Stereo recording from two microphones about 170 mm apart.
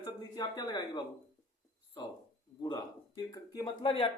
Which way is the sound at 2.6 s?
25° left (ahead or behind).